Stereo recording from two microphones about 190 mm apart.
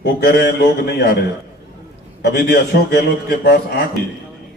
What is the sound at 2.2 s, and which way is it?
A man's voice, 60° left (ahead or behind).